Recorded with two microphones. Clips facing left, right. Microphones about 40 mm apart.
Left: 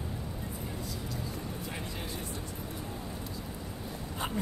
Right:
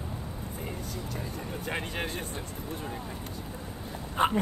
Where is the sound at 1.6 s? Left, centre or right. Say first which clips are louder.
Right 6 dB; right.